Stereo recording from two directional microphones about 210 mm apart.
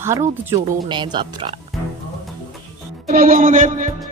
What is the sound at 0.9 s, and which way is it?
Speech, 20° right (ahead or behind).